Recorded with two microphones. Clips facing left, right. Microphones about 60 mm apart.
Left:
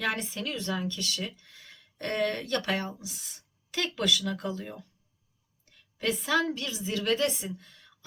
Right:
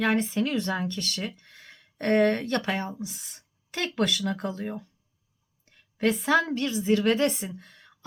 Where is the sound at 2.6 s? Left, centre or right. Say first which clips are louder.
Right 1 dB; centre.